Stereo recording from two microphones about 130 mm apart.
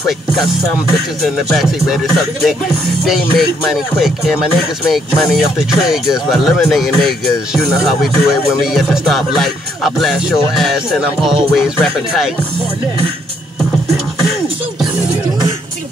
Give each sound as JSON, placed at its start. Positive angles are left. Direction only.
{"t": 1.2, "sound": "music", "side_deg": 0}